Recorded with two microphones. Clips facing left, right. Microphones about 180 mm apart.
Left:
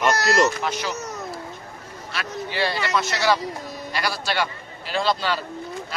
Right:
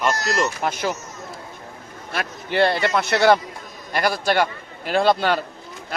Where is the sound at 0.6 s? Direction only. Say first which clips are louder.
Right 3 dB; 50° right (ahead or behind).